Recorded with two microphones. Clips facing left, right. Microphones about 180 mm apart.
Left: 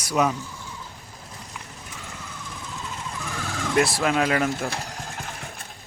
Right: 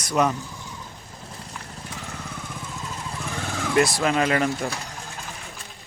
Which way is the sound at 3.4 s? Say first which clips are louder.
Right 1 dB; 15° right (ahead or behind).